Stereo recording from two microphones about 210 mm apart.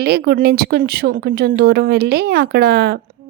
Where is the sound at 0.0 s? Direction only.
50° right (ahead or behind).